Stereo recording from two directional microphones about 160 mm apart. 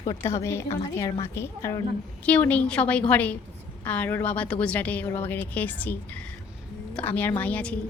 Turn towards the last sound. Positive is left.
turn(degrees=10)  # may be behind; listen again after turning